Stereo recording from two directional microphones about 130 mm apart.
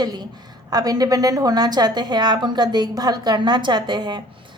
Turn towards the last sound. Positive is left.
turn(degrees=-35)  # may be behind; listen again after turning